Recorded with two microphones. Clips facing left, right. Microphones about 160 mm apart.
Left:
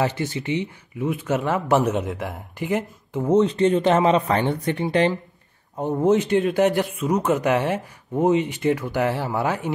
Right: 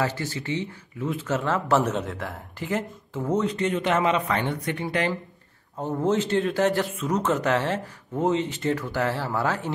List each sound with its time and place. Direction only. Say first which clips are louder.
0.0 s a man's voice: left 4 dB; 20° left (ahead or behind)